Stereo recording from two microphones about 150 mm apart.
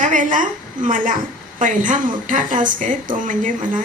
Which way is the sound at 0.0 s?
60° right (ahead or behind).